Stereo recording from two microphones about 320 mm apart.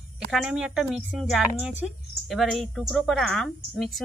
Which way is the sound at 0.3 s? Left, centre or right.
Centre.